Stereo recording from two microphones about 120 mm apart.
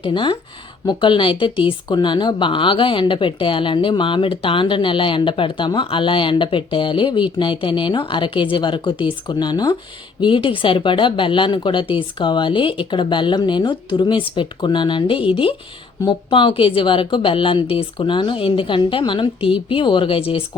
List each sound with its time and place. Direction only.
0.0 s speech: 40° left (ahead or behind)